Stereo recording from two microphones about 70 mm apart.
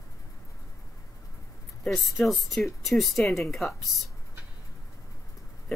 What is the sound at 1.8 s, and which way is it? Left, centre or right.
Speech, centre.